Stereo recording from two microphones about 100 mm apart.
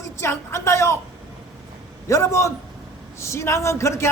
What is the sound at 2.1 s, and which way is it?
A man's voice, 30° left (ahead or behind).